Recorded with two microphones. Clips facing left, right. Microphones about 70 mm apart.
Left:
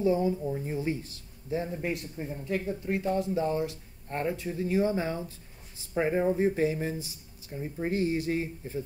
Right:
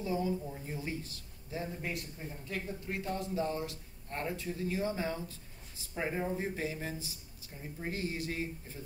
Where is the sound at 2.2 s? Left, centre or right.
Left.